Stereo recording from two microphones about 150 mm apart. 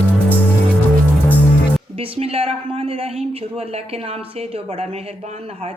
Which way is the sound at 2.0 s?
40° right (ahead or behind).